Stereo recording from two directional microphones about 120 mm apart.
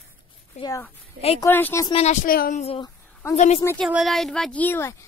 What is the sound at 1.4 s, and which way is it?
Speech, 15° left (ahead or behind).